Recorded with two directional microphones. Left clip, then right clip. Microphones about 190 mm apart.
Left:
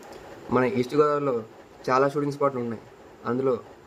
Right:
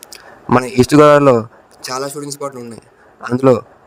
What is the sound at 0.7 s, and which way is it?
Speech, 55° right (ahead or behind).